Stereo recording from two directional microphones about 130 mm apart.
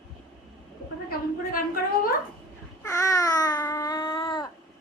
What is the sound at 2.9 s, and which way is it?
Babbling, 25° left (ahead or behind).